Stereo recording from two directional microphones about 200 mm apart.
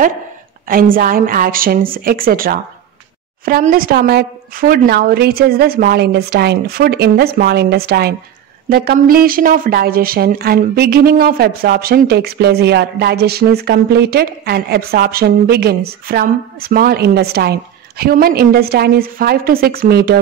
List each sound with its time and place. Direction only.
0.7 s speech: 45° right (ahead or behind)